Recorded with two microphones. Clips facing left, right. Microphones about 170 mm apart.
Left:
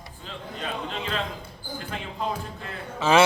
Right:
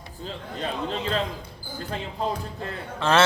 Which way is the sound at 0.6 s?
35° right (ahead or behind).